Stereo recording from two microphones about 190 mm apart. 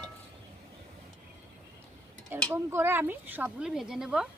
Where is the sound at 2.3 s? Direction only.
10° right (ahead or behind).